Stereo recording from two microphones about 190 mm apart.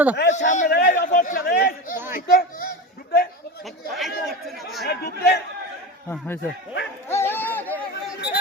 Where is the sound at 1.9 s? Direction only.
10° right (ahead or behind).